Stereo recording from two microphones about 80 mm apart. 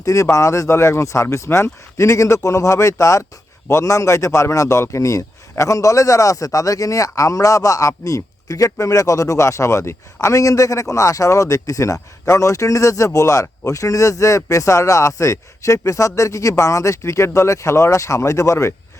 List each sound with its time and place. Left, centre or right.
0.0 s a man's voice: left